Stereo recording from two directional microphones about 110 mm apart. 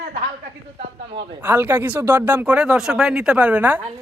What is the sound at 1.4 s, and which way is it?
Speech, 20° right (ahead or behind).